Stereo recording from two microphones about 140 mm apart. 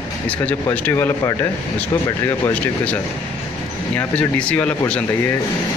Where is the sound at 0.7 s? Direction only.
15° left (ahead or behind).